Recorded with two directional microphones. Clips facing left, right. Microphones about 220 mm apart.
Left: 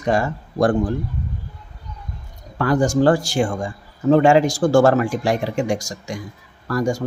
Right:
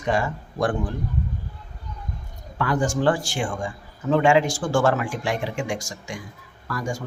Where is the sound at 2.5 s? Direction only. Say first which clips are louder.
Left 6 dB; 40° left (ahead or behind).